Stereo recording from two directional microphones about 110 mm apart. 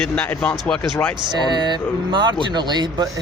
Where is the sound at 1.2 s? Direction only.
45° right (ahead or behind).